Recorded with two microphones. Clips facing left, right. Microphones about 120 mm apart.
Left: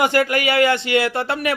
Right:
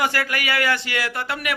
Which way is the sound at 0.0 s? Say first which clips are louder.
Left 6 dB; 25° left (ahead or behind).